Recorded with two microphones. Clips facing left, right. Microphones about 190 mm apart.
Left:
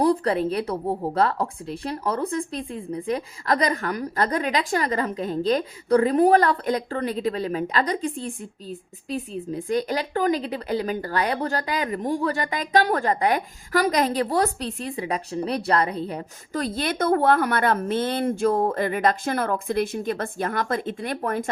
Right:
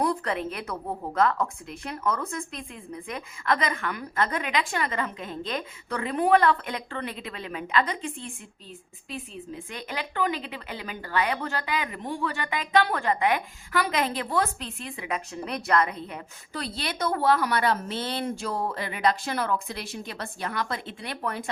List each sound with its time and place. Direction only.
0.0 s speech: 35° left (ahead or behind)